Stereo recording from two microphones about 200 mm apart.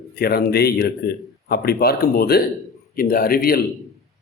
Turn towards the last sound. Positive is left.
turn(degrees=50)  # may be behind; listen again after turning